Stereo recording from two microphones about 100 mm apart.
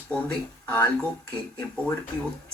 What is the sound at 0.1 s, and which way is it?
Speech, 15° left (ahead or behind).